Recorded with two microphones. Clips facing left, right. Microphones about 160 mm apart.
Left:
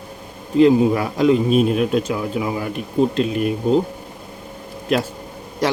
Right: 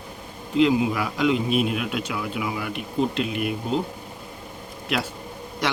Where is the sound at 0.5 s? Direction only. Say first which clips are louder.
Left 6 dB; 40° left (ahead or behind).